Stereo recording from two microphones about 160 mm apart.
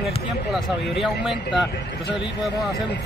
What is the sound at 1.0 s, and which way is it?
Speech, centre (ahead or behind).